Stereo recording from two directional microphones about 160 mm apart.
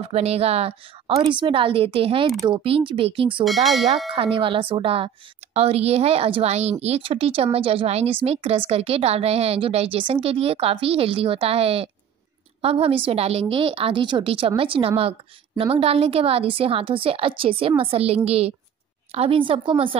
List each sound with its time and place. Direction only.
0.1 s speech: 40° right (ahead or behind)
3.4 s bell: centre (ahead or behind)
4.1 s speech: 35° right (ahead or behind)